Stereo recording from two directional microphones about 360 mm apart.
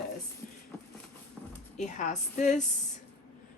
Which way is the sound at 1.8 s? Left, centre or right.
Centre.